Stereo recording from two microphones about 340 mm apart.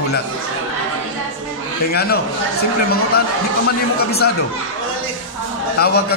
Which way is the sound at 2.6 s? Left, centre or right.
Left.